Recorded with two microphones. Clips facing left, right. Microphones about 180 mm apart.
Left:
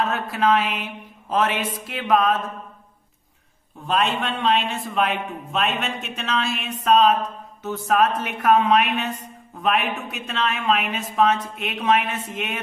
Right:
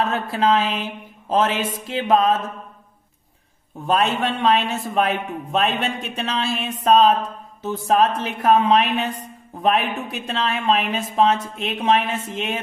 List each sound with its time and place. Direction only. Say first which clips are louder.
0.1 s speech: right 1 dB; 30° right (ahead or behind)
3.8 s a man's voice: right 3 dB; 45° right (ahead or behind); by 12.5 s 30° right (ahead or behind)